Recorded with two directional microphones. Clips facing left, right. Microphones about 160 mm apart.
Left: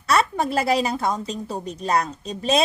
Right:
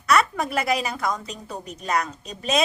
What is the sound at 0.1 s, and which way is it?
A woman's voice, 30° left (ahead or behind).